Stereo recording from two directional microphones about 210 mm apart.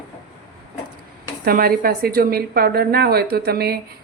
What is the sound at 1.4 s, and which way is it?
A woman's voice, 45° right (ahead or behind).